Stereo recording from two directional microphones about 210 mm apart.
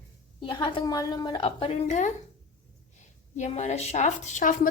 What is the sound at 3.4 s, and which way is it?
Speech, 35° left (ahead or behind).